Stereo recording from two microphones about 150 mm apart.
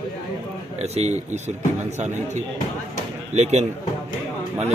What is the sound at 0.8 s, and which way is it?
Speech, 45° right (ahead or behind).